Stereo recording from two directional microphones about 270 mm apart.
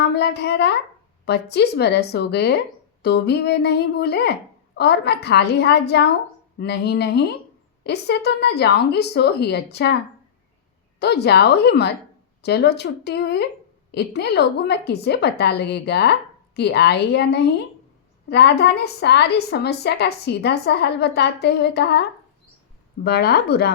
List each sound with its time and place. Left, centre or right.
0.0 s a woman's voice: left
11.0 s a woman's voice: left
23.0 s a woman's voice: left